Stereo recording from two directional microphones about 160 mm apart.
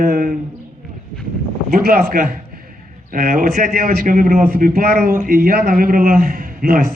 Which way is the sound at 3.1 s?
55° right (ahead or behind).